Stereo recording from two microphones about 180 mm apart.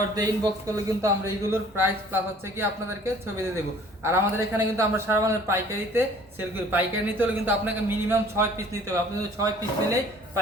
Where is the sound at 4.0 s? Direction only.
15° right (ahead or behind).